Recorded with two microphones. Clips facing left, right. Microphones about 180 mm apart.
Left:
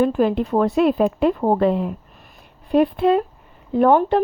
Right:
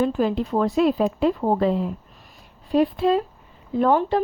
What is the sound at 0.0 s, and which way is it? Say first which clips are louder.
Speech: left 3 dB; 55° left (ahead or behind).